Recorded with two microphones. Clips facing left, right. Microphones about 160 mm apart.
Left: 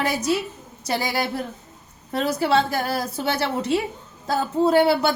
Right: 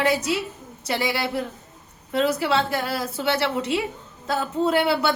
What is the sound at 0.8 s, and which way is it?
A woman's voice, 40° left (ahead or behind).